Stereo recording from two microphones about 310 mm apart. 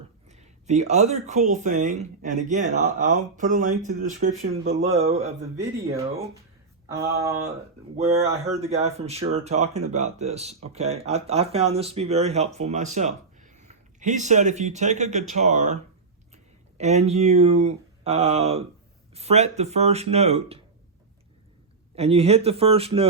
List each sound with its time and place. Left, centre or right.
0.3 s speech: right
7.9 s speech: right
21.9 s speech: centre